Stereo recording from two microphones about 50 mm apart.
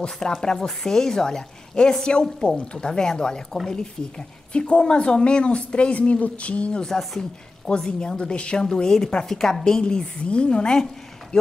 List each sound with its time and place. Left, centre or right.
0.0 s a woman's voice: centre
6.9 s a woman's voice: centre